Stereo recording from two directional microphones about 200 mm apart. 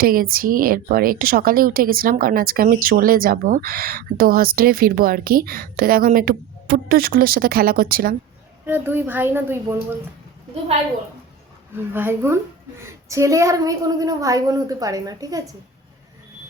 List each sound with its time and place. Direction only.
0.0 s a woman's voice: 45° right (ahead or behind)
8.6 s a woman's voice: 10° right (ahead or behind)
11.8 s a woman's voice: 10° right (ahead or behind)